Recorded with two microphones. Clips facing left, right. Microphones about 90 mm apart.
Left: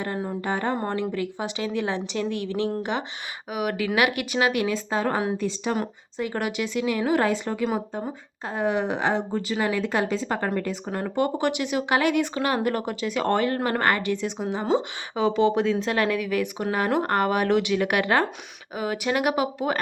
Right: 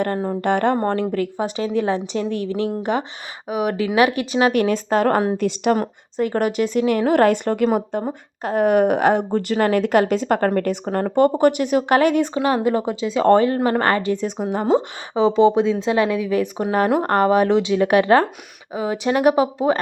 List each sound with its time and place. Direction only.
0.4 s speech: 70° right (ahead or behind)
1.1 s a woman's voice: 45° right (ahead or behind)
3.5 s speech: 30° right (ahead or behind)
4.5 s speech: 50° right (ahead or behind)
5.4 s speech: 75° right (ahead or behind)
5.7 s a woman's voice: 45° right (ahead or behind)
10.9 s a woman's voice: 50° right (ahead or behind)
12.3 s a woman's voice: 25° right (ahead or behind); by 14.8 s 45° right (ahead or behind)
15.1 s speech: 25° right (ahead or behind)